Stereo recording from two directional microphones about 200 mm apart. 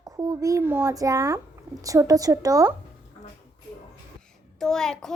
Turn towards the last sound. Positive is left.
turn(degrees=0)  # may be behind; listen again after turning